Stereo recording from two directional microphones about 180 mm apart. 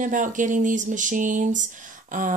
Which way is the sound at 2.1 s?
45° right (ahead or behind).